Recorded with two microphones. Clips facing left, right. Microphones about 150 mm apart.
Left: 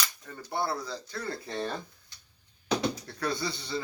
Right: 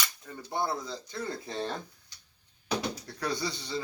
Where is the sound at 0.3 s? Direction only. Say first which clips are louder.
Even; 15° right (ahead or behind).